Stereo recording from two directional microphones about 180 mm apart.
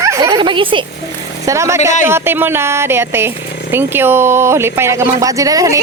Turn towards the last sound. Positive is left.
turn(degrees=-20)  # may be behind; listen again after turning